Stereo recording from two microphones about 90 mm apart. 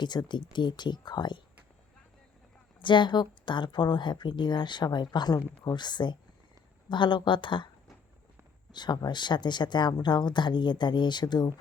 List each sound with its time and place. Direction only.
0.0 s speech: 55° left (ahead or behind)
2.8 s speech: 60° left (ahead or behind)
8.7 s speech: 55° left (ahead or behind)